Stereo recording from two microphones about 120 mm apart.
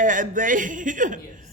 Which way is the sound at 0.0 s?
90° right.